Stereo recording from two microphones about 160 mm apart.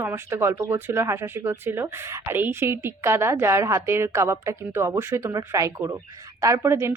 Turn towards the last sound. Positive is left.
turn(degrees=-15)  # may be behind; listen again after turning